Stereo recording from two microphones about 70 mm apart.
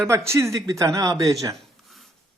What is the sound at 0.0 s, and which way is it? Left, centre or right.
A man's voice, right.